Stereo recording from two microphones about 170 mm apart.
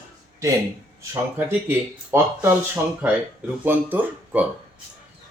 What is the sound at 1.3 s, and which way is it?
Speech, 10° right (ahead or behind).